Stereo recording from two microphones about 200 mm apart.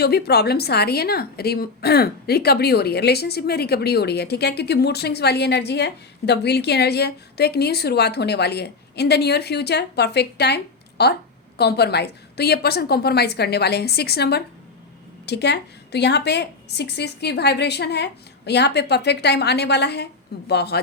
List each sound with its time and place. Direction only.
0.0 s a woman's voice: 55° left (ahead or behind)